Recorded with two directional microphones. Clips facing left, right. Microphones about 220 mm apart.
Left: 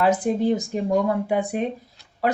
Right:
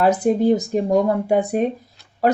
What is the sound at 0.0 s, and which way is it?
Speech, 40° right (ahead or behind).